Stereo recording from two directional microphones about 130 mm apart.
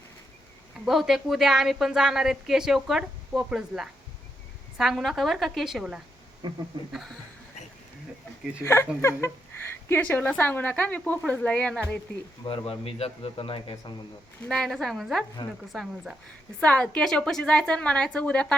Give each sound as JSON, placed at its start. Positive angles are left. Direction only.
{"t": 0.9, "sound": "a woman's voice", "side_deg": 0}
{"t": 6.4, "sound": "speech", "side_deg": -35}
{"t": 6.9, "sound": "a woman's voice", "side_deg": 0}
{"t": 8.6, "sound": "a sound", "side_deg": 20}
{"t": 9.9, "sound": "a woman's voice", "side_deg": 15}
{"t": 12.5, "sound": "a man's voice", "side_deg": 45}
{"t": 14.4, "sound": "a woman's voice", "side_deg": 5}
{"t": 15.4, "sound": "a woman's voice", "side_deg": 35}
{"t": 15.7, "sound": "a woman's voice", "side_deg": 0}